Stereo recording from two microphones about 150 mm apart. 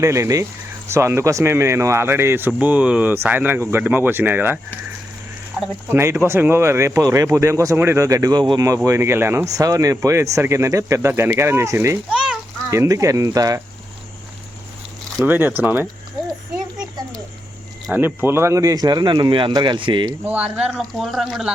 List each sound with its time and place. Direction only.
0.0 s speech: 20° right (ahead or behind)
5.5 s a sound: 5° right (ahead or behind)
5.9 s speech: 15° right (ahead or behind)
12.0 s a sound: 5° right (ahead or behind)
12.7 s speech: 20° right (ahead or behind)
15.2 s speech: 10° right (ahead or behind)
17.9 s speech: 15° right (ahead or behind); by 20.1 s 30° right (ahead or behind)
20.2 s speech: 10° right (ahead or behind)